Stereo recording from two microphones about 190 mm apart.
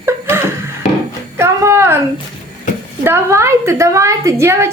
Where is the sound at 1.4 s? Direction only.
15° right (ahead or behind).